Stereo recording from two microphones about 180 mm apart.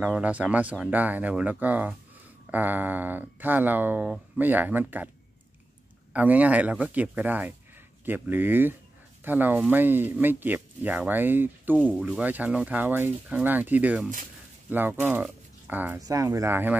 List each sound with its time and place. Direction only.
0.0 s speech: 10° right (ahead or behind)
6.1 s speech: 10° right (ahead or behind)